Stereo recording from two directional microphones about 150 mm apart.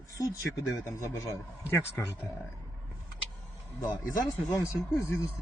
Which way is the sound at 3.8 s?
20° left (ahead or behind).